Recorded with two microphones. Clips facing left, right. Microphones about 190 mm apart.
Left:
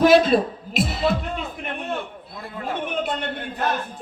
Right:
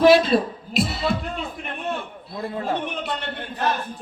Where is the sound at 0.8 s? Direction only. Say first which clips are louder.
Left 1 dB; 45° left (ahead or behind).